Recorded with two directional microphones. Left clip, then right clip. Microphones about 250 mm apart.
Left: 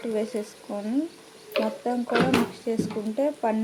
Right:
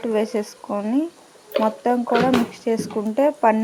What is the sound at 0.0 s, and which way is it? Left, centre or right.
Speech, right.